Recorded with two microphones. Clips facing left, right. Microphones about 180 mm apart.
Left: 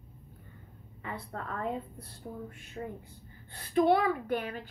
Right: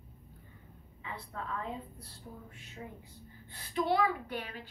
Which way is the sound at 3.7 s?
50° left (ahead or behind).